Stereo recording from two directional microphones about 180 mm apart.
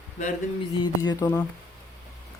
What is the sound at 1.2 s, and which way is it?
Speech, 10° left (ahead or behind).